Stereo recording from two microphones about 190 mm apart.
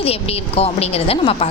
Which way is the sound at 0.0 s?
30° left (ahead or behind).